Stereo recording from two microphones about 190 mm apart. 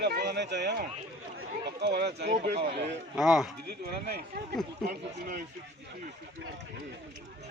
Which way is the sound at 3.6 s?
55° right (ahead or behind).